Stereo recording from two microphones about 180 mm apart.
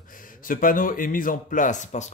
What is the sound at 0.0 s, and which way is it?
A man's voice, 50° left (ahead or behind).